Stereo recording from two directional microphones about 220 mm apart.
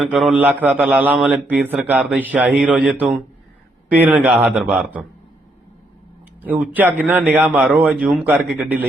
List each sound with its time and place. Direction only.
0.0 s a man's voice: 5° right (ahead or behind)
6.4 s a man's voice: 5° right (ahead or behind)